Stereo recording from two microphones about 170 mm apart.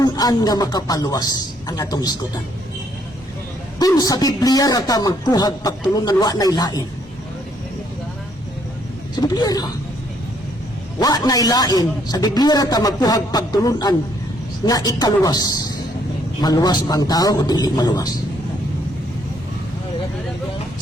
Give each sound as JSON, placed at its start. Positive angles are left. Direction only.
{"t": 0.0, "sound": "a man's voice", "side_deg": 20}
{"t": 3.8, "sound": "a man's voice", "side_deg": 20}
{"t": 9.2, "sound": "a man's voice", "side_deg": 25}
{"t": 11.0, "sound": "a man's voice", "side_deg": 20}